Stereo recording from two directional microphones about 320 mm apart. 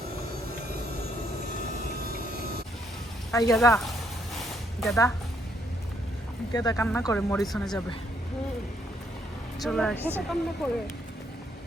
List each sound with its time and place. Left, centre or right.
3.3 s speech: centre
4.4 s a sound: centre
6.5 s speech: centre
9.6 s speech: centre